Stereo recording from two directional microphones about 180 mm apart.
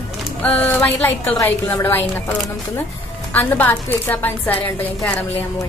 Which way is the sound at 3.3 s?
10° left (ahead or behind).